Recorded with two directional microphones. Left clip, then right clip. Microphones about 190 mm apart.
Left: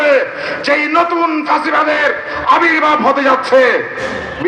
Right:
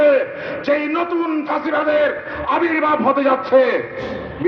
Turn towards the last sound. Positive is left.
turn(degrees=20)  # may be behind; listen again after turning